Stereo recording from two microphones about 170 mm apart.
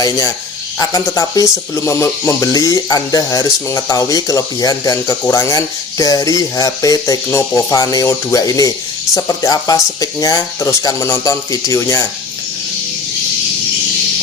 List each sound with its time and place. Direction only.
0.8 s speech: 20° left (ahead or behind)